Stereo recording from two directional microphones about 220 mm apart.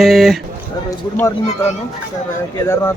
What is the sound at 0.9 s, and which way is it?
Speech, 15° left (ahead or behind).